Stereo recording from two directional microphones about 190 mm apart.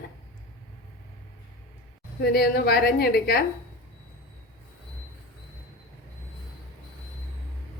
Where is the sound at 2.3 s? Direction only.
55° left (ahead or behind).